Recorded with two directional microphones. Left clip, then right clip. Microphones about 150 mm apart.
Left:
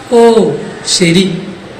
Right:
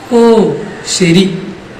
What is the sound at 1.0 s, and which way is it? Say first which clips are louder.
Speech: right 1 dB; 40° right (ahead or behind).